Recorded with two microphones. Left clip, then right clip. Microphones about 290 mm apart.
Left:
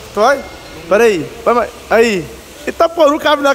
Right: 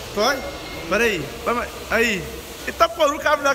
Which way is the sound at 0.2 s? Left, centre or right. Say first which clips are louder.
Left 9 dB; centre.